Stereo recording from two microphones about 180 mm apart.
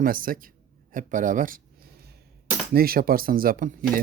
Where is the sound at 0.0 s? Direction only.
50° right (ahead or behind).